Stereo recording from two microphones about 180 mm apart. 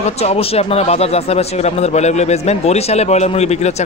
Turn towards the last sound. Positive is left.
turn(degrees=35)  # may be behind; listen again after turning